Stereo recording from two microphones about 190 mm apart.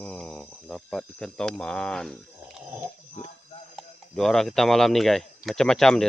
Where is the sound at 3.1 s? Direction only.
35° left (ahead or behind).